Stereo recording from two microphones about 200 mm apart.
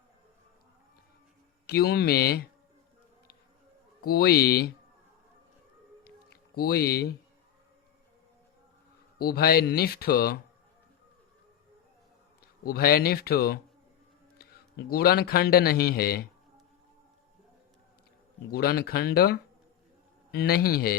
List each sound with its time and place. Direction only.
1.6 s speech: 55° left (ahead or behind)
4.0 s speech: 50° left (ahead or behind)
6.1 s a sound: 50° left (ahead or behind)
9.1 s speech: 50° left (ahead or behind)
12.4 s a man's voice: 50° left (ahead or behind)
18.5 s speech: 50° left (ahead or behind)